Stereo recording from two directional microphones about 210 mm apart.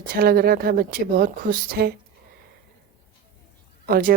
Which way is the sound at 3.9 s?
40° right (ahead or behind).